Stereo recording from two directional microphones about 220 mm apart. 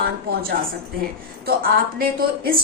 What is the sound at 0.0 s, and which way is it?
A woman's voice, 45° right (ahead or behind).